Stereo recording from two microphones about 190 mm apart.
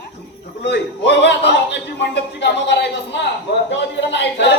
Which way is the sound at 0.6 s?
65° left (ahead or behind).